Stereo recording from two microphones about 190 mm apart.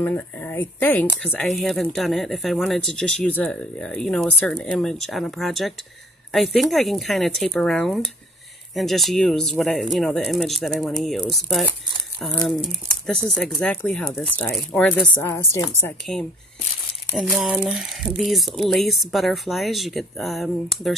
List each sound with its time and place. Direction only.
0.0 s speech: 10° left (ahead or behind)
17.1 s speech: 5° right (ahead or behind)